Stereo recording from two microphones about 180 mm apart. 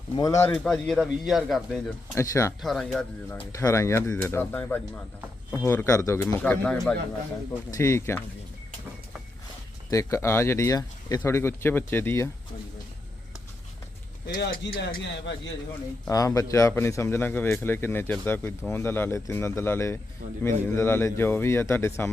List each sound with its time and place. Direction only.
0.2 s speech: 15° left (ahead or behind)
0.5 s speech: 5° left (ahead or behind)
2.1 s speech: 15° left (ahead or behind)
2.6 s speech: centre (ahead or behind)
3.5 s speech: 15° left (ahead or behind)
9.9 s speech: 15° left (ahead or behind)
14.3 s a man's voice: 50° left (ahead or behind)
16.0 s speech: 20° left (ahead or behind)